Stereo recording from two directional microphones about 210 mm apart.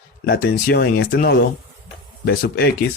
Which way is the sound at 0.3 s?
45° left (ahead or behind).